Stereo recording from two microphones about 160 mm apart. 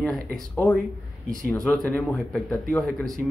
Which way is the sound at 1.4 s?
5° left (ahead or behind).